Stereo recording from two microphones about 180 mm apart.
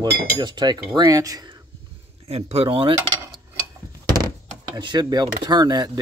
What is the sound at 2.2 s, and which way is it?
Speech, 35° right (ahead or behind).